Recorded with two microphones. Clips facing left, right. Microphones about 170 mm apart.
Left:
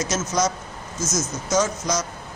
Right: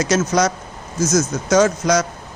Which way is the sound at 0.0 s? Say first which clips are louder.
Right 6 dB; 70° right (ahead or behind).